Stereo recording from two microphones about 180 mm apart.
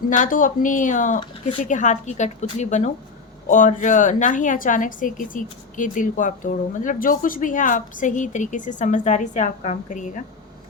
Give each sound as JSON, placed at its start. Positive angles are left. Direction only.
{"t": 0.2, "sound": "a woman's voice", "side_deg": 45}